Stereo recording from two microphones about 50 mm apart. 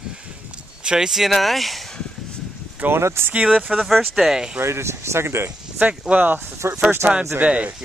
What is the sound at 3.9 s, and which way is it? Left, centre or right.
Speech, centre.